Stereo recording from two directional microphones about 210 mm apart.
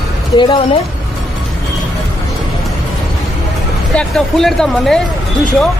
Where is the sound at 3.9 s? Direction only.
5° left (ahead or behind).